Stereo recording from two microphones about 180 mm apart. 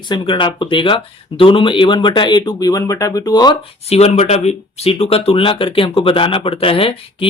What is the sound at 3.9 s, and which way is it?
Speech, 35° left (ahead or behind).